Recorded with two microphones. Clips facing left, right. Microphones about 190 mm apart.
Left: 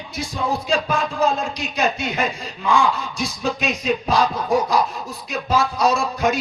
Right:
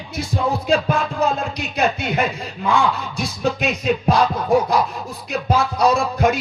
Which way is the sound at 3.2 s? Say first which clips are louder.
Right 2 dB; 60° right (ahead or behind).